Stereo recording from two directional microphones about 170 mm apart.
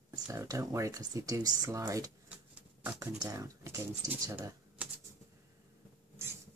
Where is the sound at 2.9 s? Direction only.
20° right (ahead or behind).